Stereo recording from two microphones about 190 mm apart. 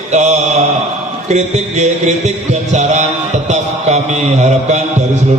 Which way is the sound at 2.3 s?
35° right (ahead or behind).